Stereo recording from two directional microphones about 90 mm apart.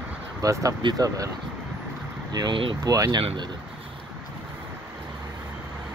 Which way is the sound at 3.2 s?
90° right.